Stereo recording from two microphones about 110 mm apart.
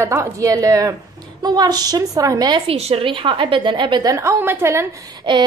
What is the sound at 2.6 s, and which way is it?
A woman's voice, 65° right (ahead or behind).